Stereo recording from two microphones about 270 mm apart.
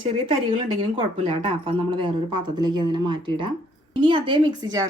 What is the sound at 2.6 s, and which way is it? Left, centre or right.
A woman's voice, centre.